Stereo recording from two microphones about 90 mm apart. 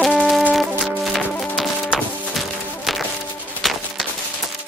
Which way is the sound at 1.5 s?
Centre (ahead or behind).